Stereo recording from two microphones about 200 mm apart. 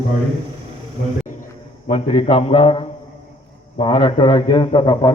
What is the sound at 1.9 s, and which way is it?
A man's voice, 30° left (ahead or behind).